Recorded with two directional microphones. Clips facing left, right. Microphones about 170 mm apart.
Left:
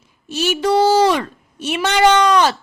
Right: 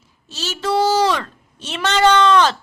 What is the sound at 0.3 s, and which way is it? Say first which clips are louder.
A woman's voice: left 5 dB; 15° left (ahead or behind).